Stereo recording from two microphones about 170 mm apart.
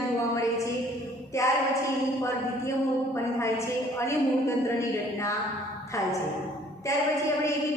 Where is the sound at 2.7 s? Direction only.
15° left (ahead or behind).